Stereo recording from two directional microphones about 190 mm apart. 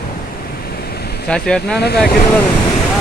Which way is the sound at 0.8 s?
55° left (ahead or behind).